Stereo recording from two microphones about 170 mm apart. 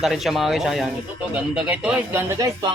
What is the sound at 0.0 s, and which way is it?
A man's voice, centre (ahead or behind).